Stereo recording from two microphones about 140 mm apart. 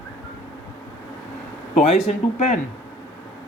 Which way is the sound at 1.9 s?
55° left (ahead or behind).